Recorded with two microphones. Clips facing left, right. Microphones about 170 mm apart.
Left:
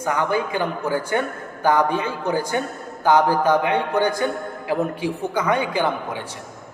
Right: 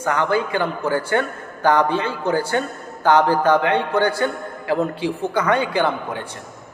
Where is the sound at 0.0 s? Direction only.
10° left (ahead or behind).